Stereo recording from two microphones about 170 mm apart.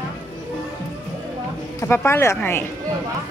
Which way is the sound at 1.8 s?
15° left (ahead or behind).